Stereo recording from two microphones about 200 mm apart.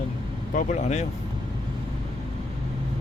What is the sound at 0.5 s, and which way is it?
Speech, 35° left (ahead or behind).